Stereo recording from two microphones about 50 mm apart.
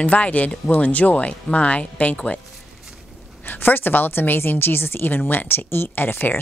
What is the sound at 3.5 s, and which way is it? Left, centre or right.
A woman's voice, left.